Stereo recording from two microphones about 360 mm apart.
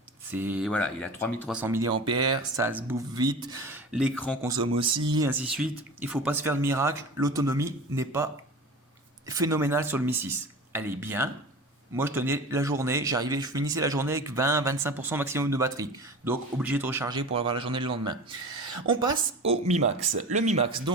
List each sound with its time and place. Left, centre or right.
0.3 s speech: centre
4.4 s speech: centre